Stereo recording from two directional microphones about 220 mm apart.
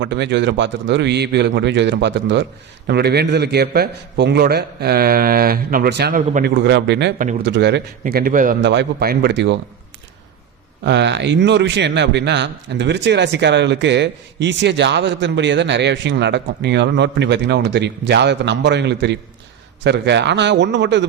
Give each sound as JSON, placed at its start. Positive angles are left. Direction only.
{"t": 0.0, "sound": "a man's voice", "side_deg": -50}
{"t": 6.5, "sound": "a man's voice", "side_deg": -50}
{"t": 8.0, "sound": "a man's voice", "side_deg": -40}
{"t": 8.6, "sound": "a man's voice", "side_deg": -50}
{"t": 10.8, "sound": "a man's voice", "side_deg": -50}